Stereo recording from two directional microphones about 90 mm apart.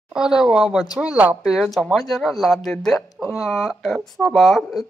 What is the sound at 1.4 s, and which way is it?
Speech, 5° left (ahead or behind).